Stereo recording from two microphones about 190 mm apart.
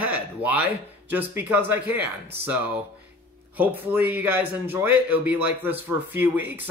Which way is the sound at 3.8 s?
10° right (ahead or behind).